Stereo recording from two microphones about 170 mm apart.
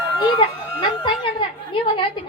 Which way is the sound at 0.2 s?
30° left (ahead or behind).